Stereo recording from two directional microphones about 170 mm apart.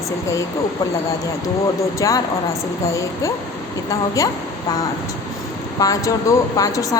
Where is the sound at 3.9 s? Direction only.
20° left (ahead or behind).